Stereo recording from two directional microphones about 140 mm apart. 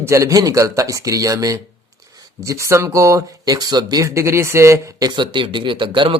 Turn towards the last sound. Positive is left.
turn(degrees=-35)  # may be behind; listen again after turning